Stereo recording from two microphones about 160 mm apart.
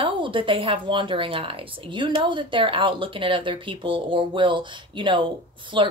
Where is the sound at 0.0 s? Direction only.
30° right (ahead or behind).